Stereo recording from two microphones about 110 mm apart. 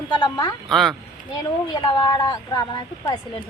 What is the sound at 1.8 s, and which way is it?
Speech, 40° left (ahead or behind).